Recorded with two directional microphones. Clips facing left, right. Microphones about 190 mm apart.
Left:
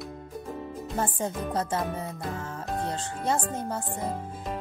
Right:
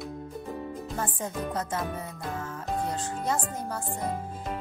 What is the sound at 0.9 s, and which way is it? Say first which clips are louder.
A woman's voice: left 4 dB; 30° left (ahead or behind).